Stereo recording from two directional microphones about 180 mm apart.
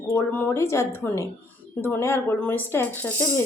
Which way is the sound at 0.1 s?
10° left (ahead or behind).